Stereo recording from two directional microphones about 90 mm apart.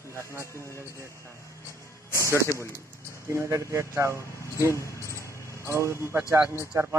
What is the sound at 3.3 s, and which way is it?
A man's voice, 30° right (ahead or behind).